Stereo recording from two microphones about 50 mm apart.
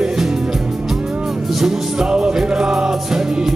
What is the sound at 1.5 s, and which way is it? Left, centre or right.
Music, centre.